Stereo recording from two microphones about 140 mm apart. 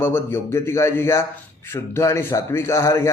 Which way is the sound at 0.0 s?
15° left (ahead or behind).